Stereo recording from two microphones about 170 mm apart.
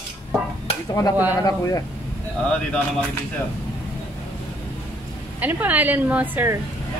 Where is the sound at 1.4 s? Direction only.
20° left (ahead or behind).